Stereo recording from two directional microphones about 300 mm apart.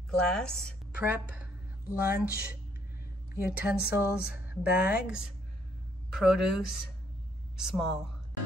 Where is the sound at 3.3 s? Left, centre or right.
Centre.